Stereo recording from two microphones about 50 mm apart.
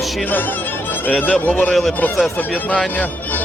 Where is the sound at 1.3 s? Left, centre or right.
Left.